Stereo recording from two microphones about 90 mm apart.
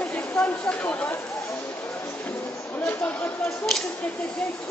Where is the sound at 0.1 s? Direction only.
15° left (ahead or behind).